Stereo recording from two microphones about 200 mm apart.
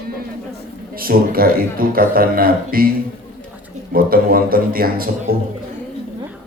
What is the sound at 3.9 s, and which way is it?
A man's voice, 45° right (ahead or behind).